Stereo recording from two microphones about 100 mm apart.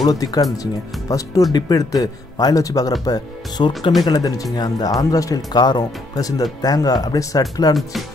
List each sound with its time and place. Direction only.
0.0 s speech: 40° left (ahead or behind)